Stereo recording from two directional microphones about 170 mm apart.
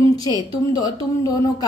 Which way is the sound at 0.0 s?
20° left (ahead or behind).